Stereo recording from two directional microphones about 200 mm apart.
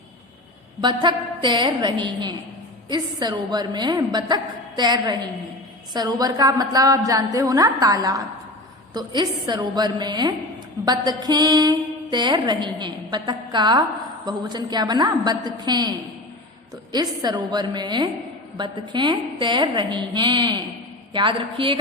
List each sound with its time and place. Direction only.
0.8 s a woman's voice: 20° right (ahead or behind)